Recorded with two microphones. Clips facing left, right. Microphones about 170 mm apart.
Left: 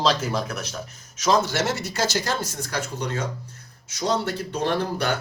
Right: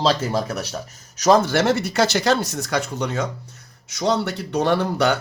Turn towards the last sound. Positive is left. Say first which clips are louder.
# right 5 dB
turn(degrees=-75)  # may be behind; listen again after turning